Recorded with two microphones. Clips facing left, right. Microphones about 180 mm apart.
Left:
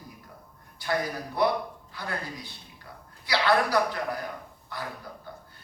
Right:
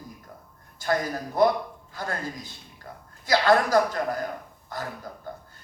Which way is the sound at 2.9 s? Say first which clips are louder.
Right 4 dB; 45° right (ahead or behind).